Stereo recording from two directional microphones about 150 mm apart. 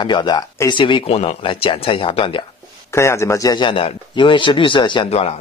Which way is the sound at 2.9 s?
20° left (ahead or behind).